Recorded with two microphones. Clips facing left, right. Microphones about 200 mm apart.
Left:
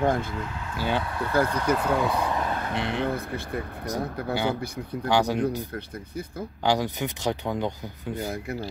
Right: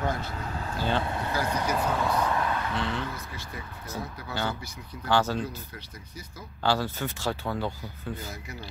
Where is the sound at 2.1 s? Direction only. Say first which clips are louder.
Even; 15° left (ahead or behind).